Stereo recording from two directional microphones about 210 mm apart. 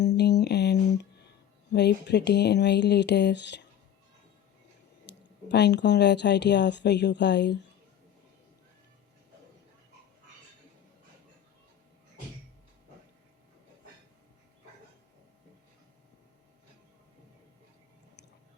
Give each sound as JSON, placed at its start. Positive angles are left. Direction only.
{"t": 0.2, "sound": "a sound", "side_deg": 50}
{"t": 1.7, "sound": "speech", "side_deg": 55}
{"t": 5.0, "sound": "speech", "side_deg": 55}